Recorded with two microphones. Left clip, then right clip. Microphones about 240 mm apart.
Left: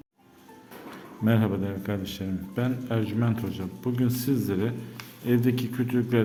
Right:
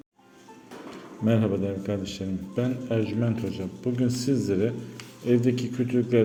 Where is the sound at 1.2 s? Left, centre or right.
Centre.